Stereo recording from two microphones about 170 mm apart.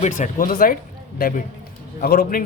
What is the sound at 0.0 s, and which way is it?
Speech, 45° left (ahead or behind).